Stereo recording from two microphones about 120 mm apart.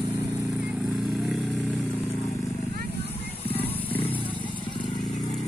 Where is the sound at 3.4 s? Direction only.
50° left (ahead or behind).